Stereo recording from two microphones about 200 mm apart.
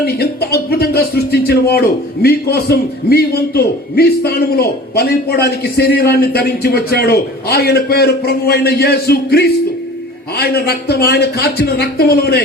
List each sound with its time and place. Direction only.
0.0 s a man's voice: 55° left (ahead or behind)